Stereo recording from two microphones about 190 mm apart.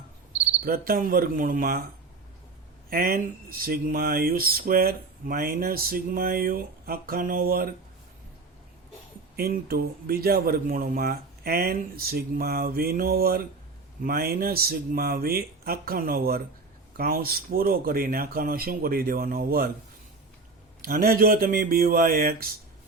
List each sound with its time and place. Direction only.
0.6 s speech: 50° right (ahead or behind)
2.9 s speech: 50° right (ahead or behind)
9.3 s speech: 55° right (ahead or behind)
20.8 s speech: 50° right (ahead or behind)